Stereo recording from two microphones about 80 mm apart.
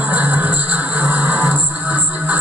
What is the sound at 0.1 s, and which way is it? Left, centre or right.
Music, centre.